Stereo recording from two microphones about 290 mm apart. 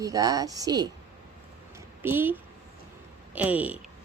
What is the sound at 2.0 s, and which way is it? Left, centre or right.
A woman's voice, centre.